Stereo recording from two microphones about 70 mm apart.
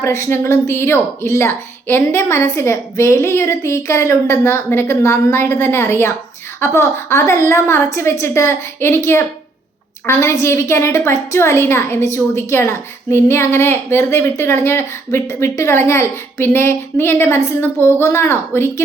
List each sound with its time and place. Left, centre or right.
0.0 s a woman's voice: left